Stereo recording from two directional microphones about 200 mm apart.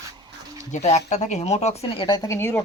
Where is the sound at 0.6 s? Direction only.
35° left (ahead or behind).